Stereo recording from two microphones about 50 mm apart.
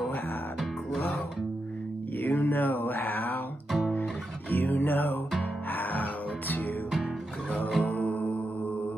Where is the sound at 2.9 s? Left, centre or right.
Left.